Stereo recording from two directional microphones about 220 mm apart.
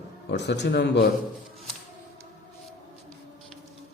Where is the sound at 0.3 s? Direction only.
50° left (ahead or behind).